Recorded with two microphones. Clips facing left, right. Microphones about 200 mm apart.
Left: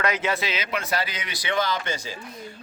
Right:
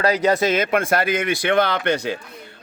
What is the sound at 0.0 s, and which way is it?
Speech, 35° right (ahead or behind).